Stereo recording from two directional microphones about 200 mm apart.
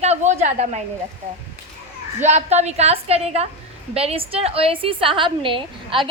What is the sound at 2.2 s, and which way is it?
A woman's voice, 35° right (ahead or behind).